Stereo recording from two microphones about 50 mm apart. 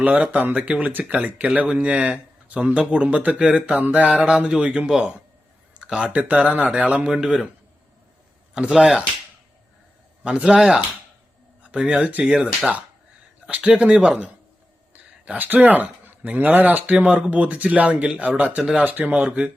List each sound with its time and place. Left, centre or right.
0.0 s speech: right
2.1 s a sound: right
2.7 s speech: right
7.1 s speech: centre
8.5 s speech: centre
10.2 s speech: centre
12.2 s speech: centre
13.5 s speech: right
16.8 s speech: right
19.0 s speech: right